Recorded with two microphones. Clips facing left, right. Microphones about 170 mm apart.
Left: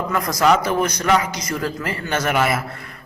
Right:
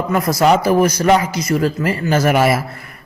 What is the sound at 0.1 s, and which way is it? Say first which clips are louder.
A man's voice: right 4 dB; 30° right (ahead or behind).